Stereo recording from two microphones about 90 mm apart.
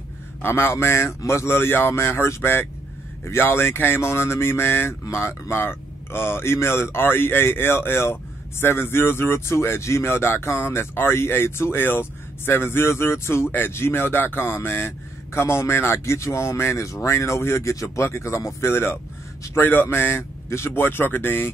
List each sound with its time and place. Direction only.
0.4 s speech: 25° left (ahead or behind)